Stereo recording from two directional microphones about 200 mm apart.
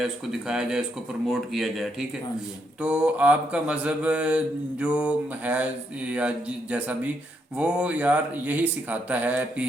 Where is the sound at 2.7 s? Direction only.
5° right (ahead or behind).